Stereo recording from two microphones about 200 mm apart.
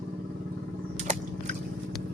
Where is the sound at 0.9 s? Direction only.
35° right (ahead or behind).